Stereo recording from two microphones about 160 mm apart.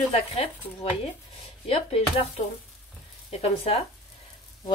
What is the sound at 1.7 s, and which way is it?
Speech, 40° left (ahead or behind).